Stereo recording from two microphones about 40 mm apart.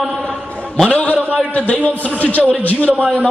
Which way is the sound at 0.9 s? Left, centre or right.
Left.